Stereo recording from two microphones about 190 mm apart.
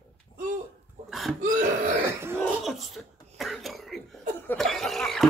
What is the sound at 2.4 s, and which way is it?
Cough, centre (ahead or behind).